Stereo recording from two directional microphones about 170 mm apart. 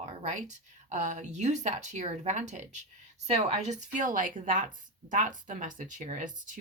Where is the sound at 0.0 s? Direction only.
40° right (ahead or behind).